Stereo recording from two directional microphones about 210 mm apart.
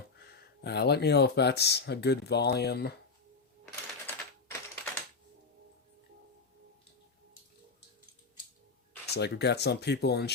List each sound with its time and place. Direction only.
0.3 s speech: 50° left (ahead or behind)
4.0 s typewriter: 10° left (ahead or behind)
9.0 s speech: 50° left (ahead or behind)